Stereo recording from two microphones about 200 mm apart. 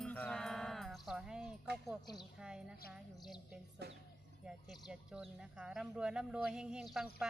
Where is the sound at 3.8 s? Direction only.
55° right (ahead or behind).